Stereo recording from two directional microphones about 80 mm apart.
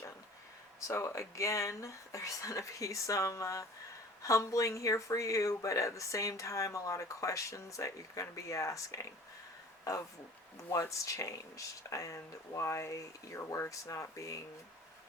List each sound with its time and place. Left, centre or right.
0.8 s speech: left
11.0 s speech: left